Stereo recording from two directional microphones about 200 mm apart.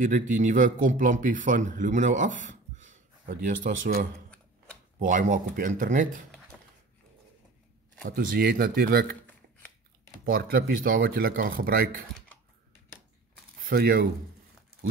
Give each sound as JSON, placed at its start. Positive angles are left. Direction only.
{"t": 0.3, "sound": "speech", "side_deg": -40}
{"t": 8.0, "sound": "speech", "side_deg": -45}
{"t": 10.2, "sound": "speech", "side_deg": -45}
{"t": 13.7, "sound": "speech", "side_deg": -45}